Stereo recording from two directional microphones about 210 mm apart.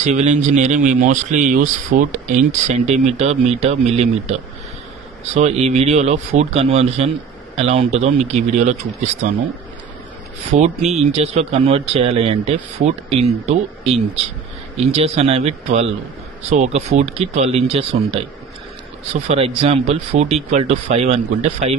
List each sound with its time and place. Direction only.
0.0 s speech: 35° right (ahead or behind)
10.5 s speech: 30° right (ahead or behind)
19.1 s speech: 30° right (ahead or behind)